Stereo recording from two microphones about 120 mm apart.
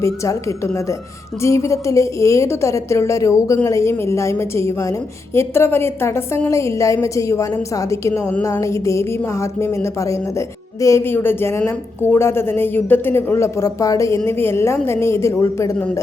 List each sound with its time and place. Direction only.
0.0 s a woman's voice: 25° left (ahead or behind)